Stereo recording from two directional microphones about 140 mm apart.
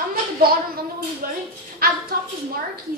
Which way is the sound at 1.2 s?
90° right.